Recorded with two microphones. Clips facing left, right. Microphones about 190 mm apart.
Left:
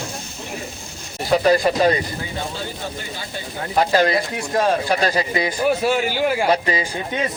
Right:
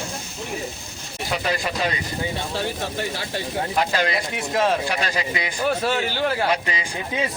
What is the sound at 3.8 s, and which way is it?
A man's voice, 40° left (ahead or behind).